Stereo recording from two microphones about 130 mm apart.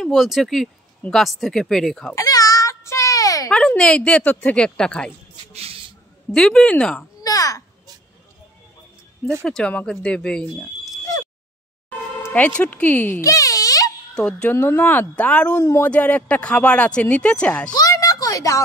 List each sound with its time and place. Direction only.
0.0 s speech: centre (ahead or behind)
2.1 s baby cry: 25° left (ahead or behind)
3.5 s speech: 5° left (ahead or behind)
5.5 s a sound: 50° right (ahead or behind)
6.3 s speech: 5° left (ahead or behind)
7.2 s children playing: 25° left (ahead or behind)
9.4 s speech: 5° left (ahead or behind)
12.3 s speech: 10° left (ahead or behind)
13.2 s a sound: 25° left (ahead or behind)
14.1 s speech: 10° left (ahead or behind)
17.7 s a sound: 30° left (ahead or behind)